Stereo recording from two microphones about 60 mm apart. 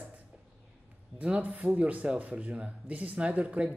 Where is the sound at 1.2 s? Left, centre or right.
Right.